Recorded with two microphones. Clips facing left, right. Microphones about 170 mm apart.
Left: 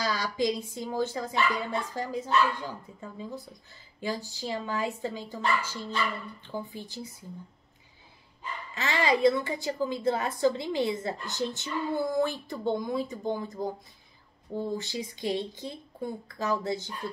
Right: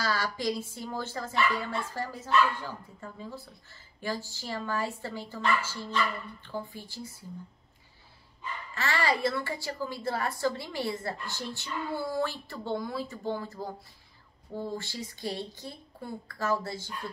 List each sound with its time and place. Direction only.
0.0 s a woman's voice: 15° left (ahead or behind)
8.7 s a woman's voice: 20° left (ahead or behind)